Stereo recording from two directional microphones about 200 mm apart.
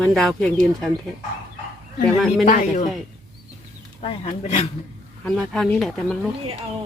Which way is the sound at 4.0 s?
30° left (ahead or behind).